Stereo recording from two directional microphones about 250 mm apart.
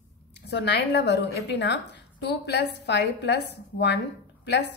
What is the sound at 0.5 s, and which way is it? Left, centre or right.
A woman's voice, left.